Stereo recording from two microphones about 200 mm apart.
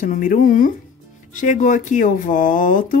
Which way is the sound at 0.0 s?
45° left (ahead or behind).